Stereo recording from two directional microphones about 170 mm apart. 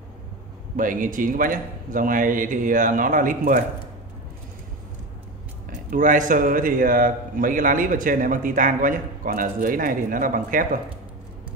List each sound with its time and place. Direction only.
0.7 s a man's voice: 50° right (ahead or behind)
5.7 s a man's voice: 50° right (ahead or behind)